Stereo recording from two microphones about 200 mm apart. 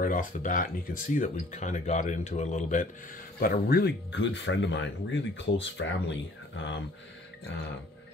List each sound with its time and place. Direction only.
0.0 s speech: 40° left (ahead or behind); by 6.8 s 65° left (ahead or behind)